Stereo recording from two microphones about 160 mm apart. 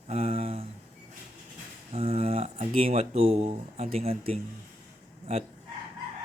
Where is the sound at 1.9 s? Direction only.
40° right (ahead or behind).